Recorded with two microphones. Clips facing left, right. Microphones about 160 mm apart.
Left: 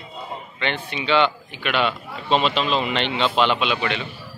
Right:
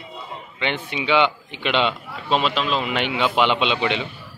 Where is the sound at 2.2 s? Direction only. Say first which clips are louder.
Left 1 dB; 5° right (ahead or behind).